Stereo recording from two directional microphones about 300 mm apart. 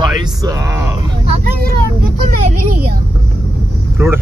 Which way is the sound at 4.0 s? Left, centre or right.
Centre.